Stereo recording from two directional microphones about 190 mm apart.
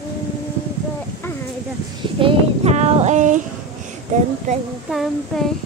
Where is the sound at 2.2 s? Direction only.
30° right (ahead or behind).